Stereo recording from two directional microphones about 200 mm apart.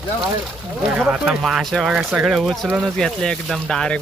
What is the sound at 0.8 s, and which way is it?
Speech, 5° right (ahead or behind).